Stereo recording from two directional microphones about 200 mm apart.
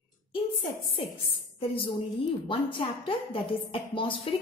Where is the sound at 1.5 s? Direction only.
25° left (ahead or behind).